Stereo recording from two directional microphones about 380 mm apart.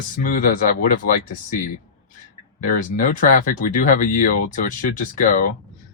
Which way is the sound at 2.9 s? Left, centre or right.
Left.